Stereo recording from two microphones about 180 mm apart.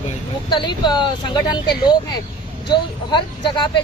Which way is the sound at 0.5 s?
25° left (ahead or behind).